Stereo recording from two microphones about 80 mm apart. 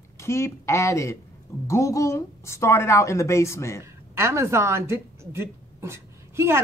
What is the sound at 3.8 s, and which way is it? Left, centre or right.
A woman's voice, right.